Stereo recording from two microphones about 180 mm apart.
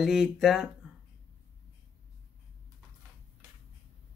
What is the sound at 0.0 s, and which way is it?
Speech, centre (ahead or behind).